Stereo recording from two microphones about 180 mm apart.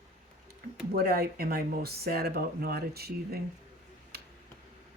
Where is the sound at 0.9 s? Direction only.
55° right (ahead or behind).